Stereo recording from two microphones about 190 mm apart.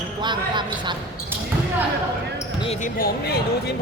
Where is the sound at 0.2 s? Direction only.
25° right (ahead or behind).